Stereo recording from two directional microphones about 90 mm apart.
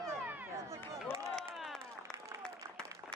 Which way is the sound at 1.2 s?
Centre (ahead or behind).